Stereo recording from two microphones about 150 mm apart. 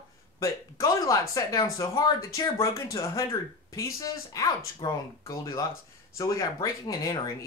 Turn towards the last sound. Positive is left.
turn(degrees=25)  # may be behind; listen again after turning